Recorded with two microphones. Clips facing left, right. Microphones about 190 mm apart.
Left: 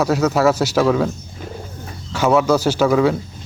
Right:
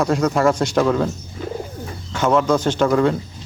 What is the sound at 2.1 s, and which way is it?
Speech, 5° left (ahead or behind).